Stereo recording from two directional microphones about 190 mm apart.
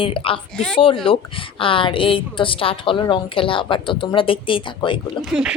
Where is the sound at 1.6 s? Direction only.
25° left (ahead or behind).